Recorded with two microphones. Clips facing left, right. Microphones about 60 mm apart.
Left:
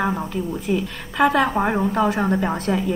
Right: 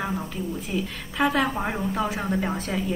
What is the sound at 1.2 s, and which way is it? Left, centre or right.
A woman's voice, left.